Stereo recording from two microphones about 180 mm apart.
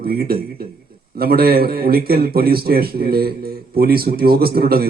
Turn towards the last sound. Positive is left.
turn(degrees=-55)  # may be behind; listen again after turning